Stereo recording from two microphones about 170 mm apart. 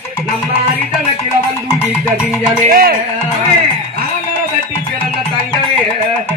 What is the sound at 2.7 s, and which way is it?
Music, 60° right (ahead or behind).